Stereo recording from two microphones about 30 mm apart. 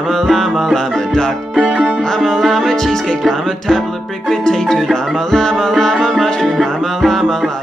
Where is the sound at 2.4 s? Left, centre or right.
Centre.